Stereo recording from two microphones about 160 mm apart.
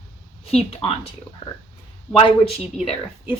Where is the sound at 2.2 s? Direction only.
35° left (ahead or behind).